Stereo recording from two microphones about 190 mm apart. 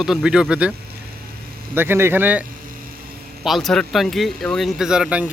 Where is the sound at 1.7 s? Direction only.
10° right (ahead or behind).